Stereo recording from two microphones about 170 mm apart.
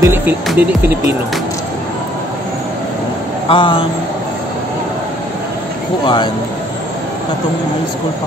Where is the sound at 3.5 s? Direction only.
30° left (ahead or behind).